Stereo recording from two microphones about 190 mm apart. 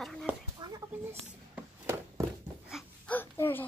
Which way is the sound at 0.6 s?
20° right (ahead or behind).